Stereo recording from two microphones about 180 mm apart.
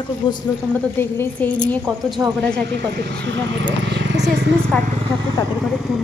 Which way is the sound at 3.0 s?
65° right (ahead or behind).